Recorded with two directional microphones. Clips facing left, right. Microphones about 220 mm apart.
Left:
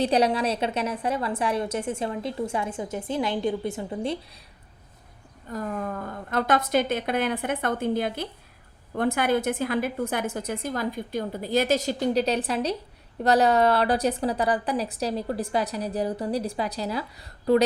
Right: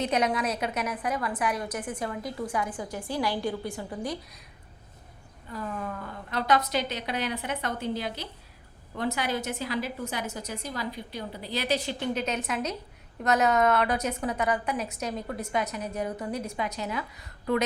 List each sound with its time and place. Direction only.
0.0 s a woman's voice: 30° left (ahead or behind)
5.5 s a woman's voice: 45° left (ahead or behind)